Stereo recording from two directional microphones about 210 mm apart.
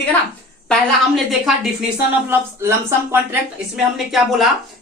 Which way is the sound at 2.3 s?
10° right (ahead or behind).